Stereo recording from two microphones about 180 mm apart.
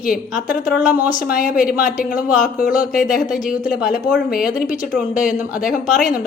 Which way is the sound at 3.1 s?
Centre (ahead or behind).